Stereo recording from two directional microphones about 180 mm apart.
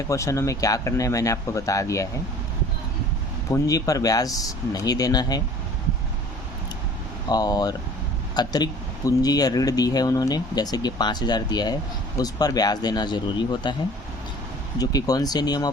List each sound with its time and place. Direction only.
0.1 s speech: 15° left (ahead or behind)
3.5 s speech: 20° left (ahead or behind)
7.3 s speech: 20° left (ahead or behind)
14.8 s speech: 20° left (ahead or behind)